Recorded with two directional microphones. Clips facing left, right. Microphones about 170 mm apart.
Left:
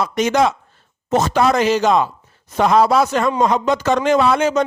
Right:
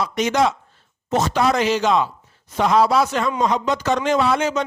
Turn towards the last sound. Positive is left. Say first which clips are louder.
# left 4 dB
turn(degrees=55)  # may be behind; listen again after turning